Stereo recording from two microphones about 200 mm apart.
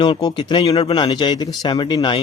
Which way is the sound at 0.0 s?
20° left (ahead or behind).